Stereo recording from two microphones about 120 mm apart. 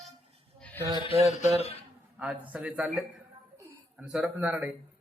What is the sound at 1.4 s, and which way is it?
Speech, 65° left (ahead or behind).